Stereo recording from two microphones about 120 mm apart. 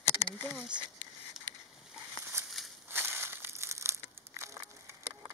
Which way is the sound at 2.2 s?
20° right (ahead or behind).